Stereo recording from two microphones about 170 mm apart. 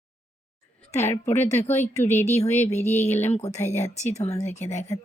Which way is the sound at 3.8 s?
40° left (ahead or behind).